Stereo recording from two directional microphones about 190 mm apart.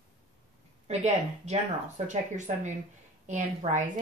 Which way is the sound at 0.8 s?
35° right (ahead or behind).